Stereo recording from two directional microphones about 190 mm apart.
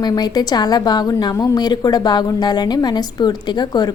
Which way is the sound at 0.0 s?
20° left (ahead or behind).